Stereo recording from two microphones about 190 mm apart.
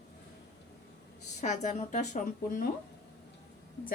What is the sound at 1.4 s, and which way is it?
A woman's voice, 40° left (ahead or behind).